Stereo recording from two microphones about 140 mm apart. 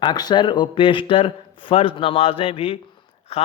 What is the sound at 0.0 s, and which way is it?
A man's voice, 30° left (ahead or behind).